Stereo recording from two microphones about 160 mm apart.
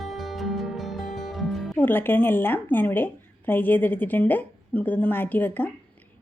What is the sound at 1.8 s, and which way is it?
A woman's voice, 10° left (ahead or behind).